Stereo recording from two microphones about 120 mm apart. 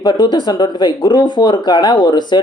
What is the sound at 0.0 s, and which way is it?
Speech, 40° left (ahead or behind).